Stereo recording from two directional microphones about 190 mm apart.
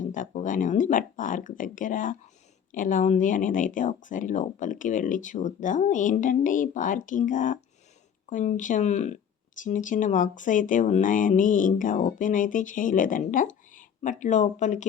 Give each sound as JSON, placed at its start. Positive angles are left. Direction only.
{"t": 0.0, "sound": "speech", "side_deg": 40}